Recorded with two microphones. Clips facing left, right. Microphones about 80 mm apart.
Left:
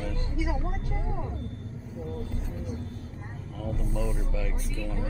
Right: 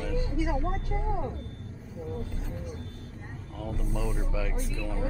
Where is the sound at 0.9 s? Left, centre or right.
Centre.